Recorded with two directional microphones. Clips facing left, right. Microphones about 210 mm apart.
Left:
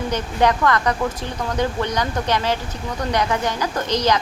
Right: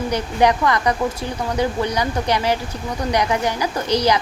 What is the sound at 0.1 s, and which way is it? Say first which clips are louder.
Speech: right 2 dB; 10° right (ahead or behind).